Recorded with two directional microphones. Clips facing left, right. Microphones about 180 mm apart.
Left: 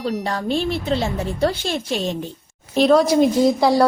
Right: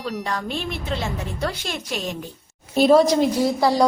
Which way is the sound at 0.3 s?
30° left (ahead or behind).